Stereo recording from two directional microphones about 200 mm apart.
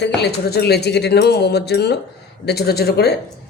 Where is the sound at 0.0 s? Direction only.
55° left (ahead or behind).